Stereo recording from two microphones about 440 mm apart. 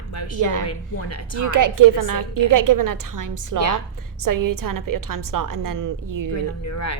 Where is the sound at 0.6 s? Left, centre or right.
Left.